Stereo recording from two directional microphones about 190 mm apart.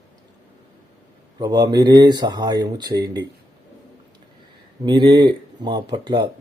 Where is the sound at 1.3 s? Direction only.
20° right (ahead or behind).